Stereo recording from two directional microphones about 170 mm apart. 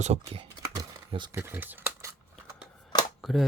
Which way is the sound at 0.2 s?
30° right (ahead or behind).